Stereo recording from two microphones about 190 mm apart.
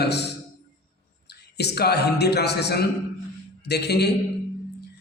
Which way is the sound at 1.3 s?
60° left (ahead or behind).